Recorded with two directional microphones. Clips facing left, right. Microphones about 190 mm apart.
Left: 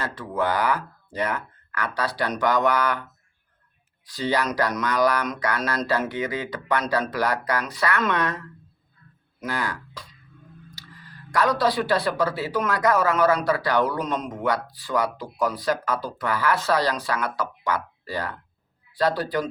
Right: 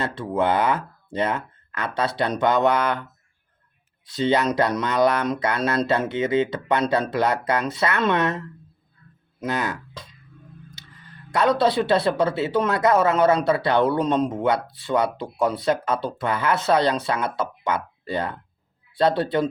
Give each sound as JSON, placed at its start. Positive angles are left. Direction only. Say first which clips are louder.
{"t": 0.0, "sound": "speech", "louder": "right 3 dB", "side_deg": -25}
{"t": 4.0, "sound": "speech", "louder": "right 4 dB", "side_deg": -25}